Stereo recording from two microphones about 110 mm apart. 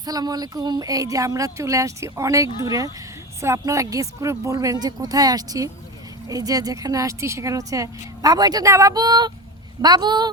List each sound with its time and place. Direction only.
0.0 s speech: 35° right (ahead or behind)